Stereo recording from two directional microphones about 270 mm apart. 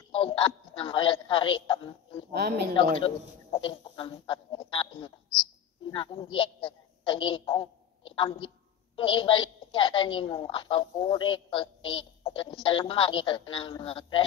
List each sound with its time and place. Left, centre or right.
0.1 s a woman's voice: centre
2.3 s a woman's voice: right
2.7 s a woman's voice: centre